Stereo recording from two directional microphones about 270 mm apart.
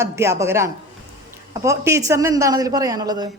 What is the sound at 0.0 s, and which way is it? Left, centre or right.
A woman's voice, centre.